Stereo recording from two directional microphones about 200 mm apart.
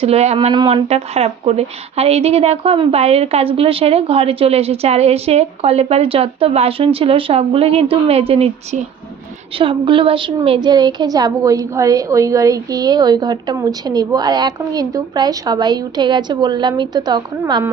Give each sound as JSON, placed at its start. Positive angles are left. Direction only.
{"t": 0.0, "sound": "a woman's voice", "side_deg": -30}